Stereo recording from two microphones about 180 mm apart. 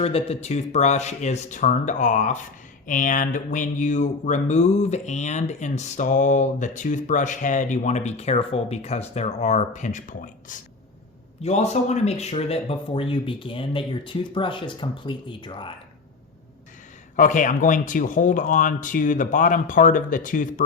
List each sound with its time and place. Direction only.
0.0 s speech: 35° left (ahead or behind)
17.2 s speech: 45° left (ahead or behind)